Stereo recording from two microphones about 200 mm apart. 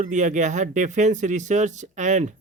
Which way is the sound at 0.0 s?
40° right (ahead or behind).